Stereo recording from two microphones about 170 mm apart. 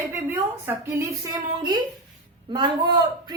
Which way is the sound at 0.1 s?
15° right (ahead or behind).